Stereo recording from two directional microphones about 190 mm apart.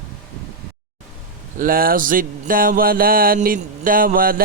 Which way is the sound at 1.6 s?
50° right (ahead or behind).